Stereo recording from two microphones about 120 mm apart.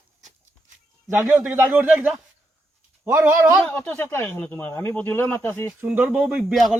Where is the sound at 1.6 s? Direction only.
15° right (ahead or behind).